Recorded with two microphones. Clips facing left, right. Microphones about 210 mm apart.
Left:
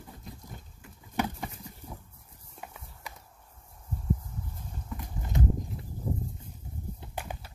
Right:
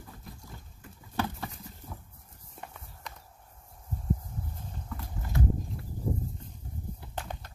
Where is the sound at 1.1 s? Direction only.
15° left (ahead or behind).